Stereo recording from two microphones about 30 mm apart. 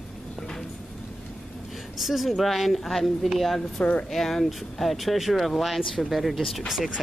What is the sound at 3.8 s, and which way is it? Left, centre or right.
Speech, left.